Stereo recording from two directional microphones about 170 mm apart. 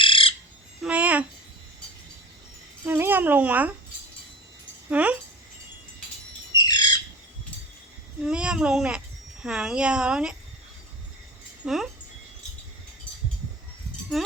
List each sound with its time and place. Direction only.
0.0 s bird: 30° left (ahead or behind)
0.8 s a sound: 5° right (ahead or behind)
2.8 s speech: 10° right (ahead or behind)
4.9 s speech: 10° right (ahead or behind)
6.5 s bird: 25° left (ahead or behind)
8.2 s speech: 5° right (ahead or behind)
11.6 s speech: centre (ahead or behind)
14.1 s speech: centre (ahead or behind)